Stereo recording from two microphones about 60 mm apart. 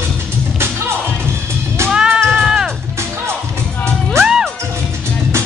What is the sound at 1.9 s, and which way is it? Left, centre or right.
Music, centre.